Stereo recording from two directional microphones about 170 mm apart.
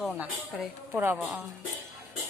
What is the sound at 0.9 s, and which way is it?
Speech, 10° right (ahead or behind).